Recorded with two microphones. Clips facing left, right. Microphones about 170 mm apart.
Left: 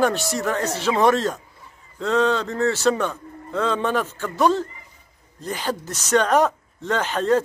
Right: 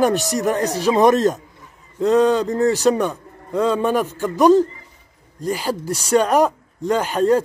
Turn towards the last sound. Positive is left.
turn(degrees=-10)  # may be behind; listen again after turning